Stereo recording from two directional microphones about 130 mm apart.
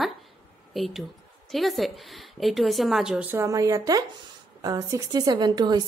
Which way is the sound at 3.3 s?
25° right (ahead or behind).